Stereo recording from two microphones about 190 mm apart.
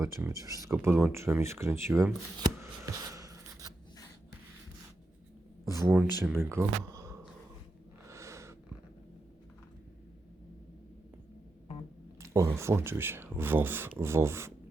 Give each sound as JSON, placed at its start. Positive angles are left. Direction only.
{"t": 0.0, "sound": "speech", "side_deg": -15}
{"t": 2.4, "sound": "writing", "side_deg": -15}
{"t": 5.6, "sound": "speech", "side_deg": -10}
{"t": 8.0, "sound": "a sound", "side_deg": -15}
{"t": 12.2, "sound": "speech", "side_deg": -15}